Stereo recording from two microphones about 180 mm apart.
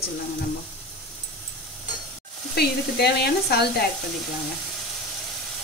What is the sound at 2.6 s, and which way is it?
Sizzle, 65° left (ahead or behind).